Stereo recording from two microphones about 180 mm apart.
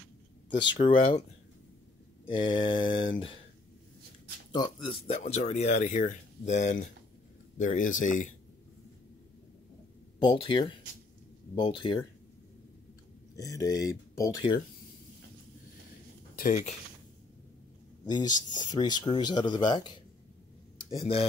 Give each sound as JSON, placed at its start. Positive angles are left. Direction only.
{"t": 0.7, "sound": "speech", "side_deg": 30}
{"t": 2.2, "sound": "speech", "side_deg": 30}
{"t": 4.5, "sound": "speech", "side_deg": 25}
{"t": 10.1, "sound": "speech", "side_deg": 30}
{"t": 13.4, "sound": "speech", "side_deg": 20}
{"t": 16.3, "sound": "speech", "side_deg": 45}
{"t": 18.0, "sound": "speech", "side_deg": 25}
{"t": 21.0, "sound": "speech", "side_deg": 35}